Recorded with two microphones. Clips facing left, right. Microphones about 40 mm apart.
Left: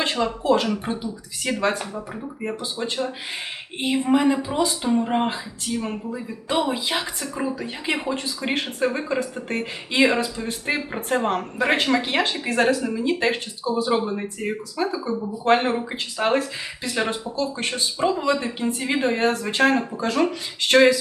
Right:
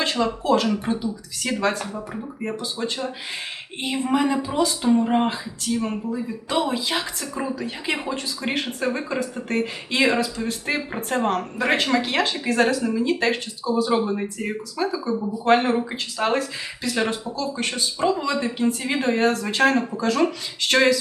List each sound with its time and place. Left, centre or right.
0.0 s a sound: centre
0.4 s speech: centre
3.8 s speech: centre